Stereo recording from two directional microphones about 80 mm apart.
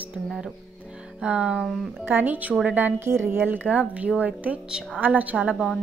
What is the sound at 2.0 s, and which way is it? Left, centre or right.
A woman's voice, right.